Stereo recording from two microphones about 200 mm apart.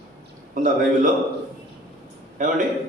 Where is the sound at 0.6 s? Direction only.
40° right (ahead or behind).